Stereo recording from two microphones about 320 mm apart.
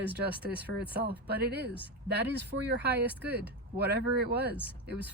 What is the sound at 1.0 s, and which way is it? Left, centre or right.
Speech, right.